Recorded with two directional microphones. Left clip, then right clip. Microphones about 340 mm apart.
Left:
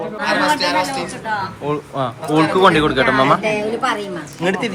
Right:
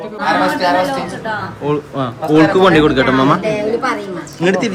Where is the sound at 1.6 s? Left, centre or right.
Centre.